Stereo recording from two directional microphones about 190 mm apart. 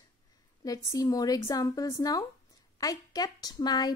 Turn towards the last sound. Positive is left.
turn(degrees=20)  # may be behind; listen again after turning